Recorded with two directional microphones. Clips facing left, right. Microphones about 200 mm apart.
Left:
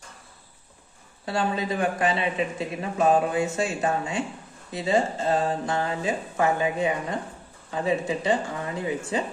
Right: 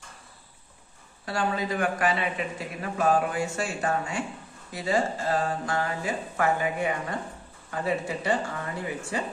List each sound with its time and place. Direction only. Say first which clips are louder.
1.2 s speech: left 2 dB; 25° left (ahead or behind)